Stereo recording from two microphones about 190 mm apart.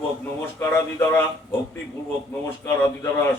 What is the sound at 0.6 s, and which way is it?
Speech, 10° left (ahead or behind).